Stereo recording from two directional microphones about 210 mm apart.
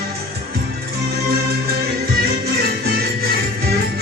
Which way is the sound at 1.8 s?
45° right (ahead or behind).